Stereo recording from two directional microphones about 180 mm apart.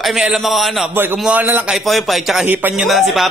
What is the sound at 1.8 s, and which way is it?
Speech, centre (ahead or behind).